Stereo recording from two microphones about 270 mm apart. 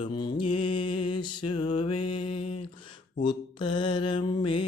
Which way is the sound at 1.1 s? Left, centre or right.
Centre.